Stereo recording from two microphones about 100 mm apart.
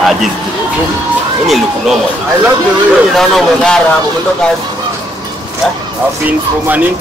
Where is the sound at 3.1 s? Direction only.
5° left (ahead or behind).